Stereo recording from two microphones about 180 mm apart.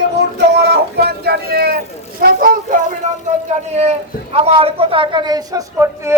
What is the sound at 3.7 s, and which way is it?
Speech, 40° right (ahead or behind).